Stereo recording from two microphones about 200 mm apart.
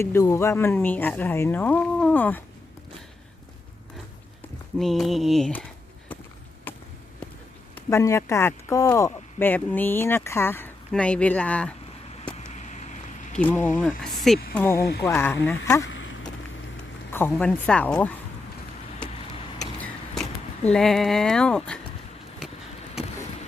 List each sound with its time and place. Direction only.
0.0 s speech: 15° left (ahead or behind)
4.8 s speech: centre (ahead or behind)
6.7 s basketball bounce: 10° left (ahead or behind)
7.8 s speech: 15° left (ahead or behind)
12.5 s vehicle: 35° left (ahead or behind)
13.3 s speech: 10° left (ahead or behind)
14.8 s speech: 55° left (ahead or behind)
15.0 s speech: 10° left (ahead or behind)
15.9 s vehicle: 65° left (ahead or behind)
17.1 s speech: 10° left (ahead or behind)
20.7 s speech: centre (ahead or behind)